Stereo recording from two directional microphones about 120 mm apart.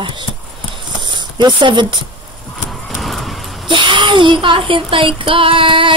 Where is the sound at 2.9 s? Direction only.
Centre (ahead or behind).